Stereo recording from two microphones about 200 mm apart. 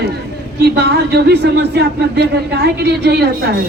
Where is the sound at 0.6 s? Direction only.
55° right (ahead or behind).